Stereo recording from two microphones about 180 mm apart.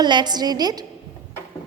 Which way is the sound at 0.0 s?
25° right (ahead or behind).